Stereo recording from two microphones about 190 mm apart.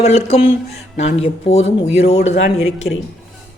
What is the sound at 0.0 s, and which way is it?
Speech, 35° left (ahead or behind).